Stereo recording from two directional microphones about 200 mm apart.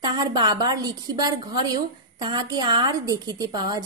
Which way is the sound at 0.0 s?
20° right (ahead or behind).